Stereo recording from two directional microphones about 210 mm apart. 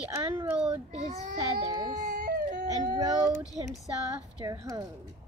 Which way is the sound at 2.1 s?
40° right (ahead or behind).